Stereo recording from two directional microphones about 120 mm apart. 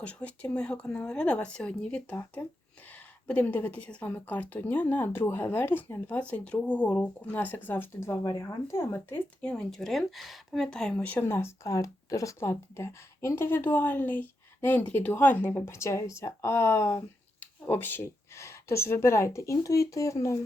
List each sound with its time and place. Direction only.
0.0 s a woman's voice: 10° left (ahead or behind)
9.4 s speech: 5° left (ahead or behind); by 20.4 s 25° left (ahead or behind)